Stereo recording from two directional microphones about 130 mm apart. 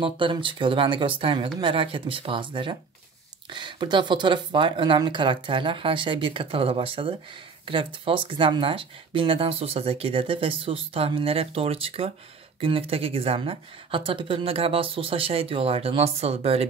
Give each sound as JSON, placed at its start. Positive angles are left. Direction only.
{"t": 0.0, "sound": "speech", "side_deg": -40}